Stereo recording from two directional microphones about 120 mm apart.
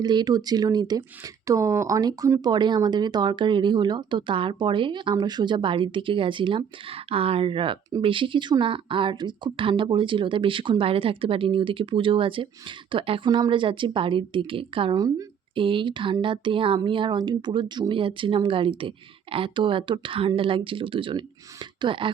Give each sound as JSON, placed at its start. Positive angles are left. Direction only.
{"t": 0.0, "sound": "speech", "side_deg": -35}
{"t": 14.9, "sound": "speech", "side_deg": -30}
{"t": 15.5, "sound": "speech", "side_deg": -45}